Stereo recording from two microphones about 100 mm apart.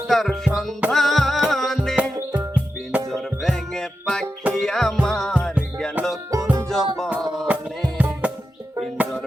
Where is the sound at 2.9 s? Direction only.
10° right (ahead or behind).